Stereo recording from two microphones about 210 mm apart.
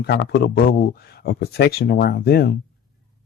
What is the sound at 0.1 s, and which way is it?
Speech, 50° left (ahead or behind).